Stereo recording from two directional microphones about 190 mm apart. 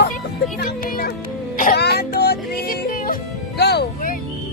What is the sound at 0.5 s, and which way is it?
Speech, 50° left (ahead or behind).